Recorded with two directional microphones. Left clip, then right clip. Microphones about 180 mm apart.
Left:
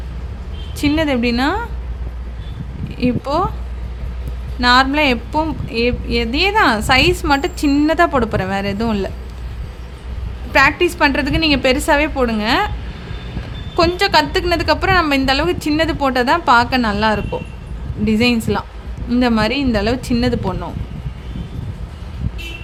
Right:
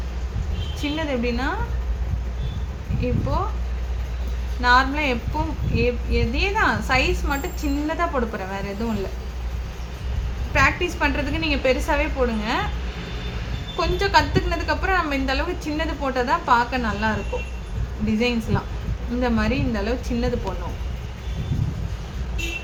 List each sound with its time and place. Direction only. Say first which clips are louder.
0.8 s a woman's voice: left 9 dB; 65° left (ahead or behind)
3.0 s a woman's voice: left 8 dB; 70° left (ahead or behind)
4.6 s a woman's voice: left 6 dB; 65° left (ahead or behind)
10.5 s a woman's voice: left 7 dB; 65° left (ahead or behind)
13.7 s a woman's voice: left 6 dB; 65° left (ahead or behind)